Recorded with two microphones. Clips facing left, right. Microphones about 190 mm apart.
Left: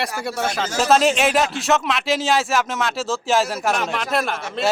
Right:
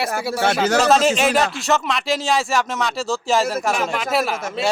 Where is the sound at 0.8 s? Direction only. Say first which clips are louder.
Left 2 dB; centre (ahead or behind).